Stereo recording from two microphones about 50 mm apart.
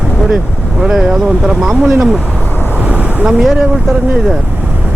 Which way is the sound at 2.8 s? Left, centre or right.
Right.